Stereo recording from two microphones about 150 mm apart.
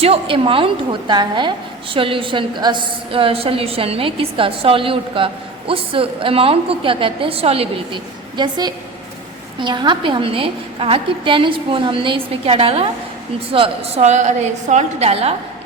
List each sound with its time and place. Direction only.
0.0 s a woman's voice: 40° right (ahead or behind)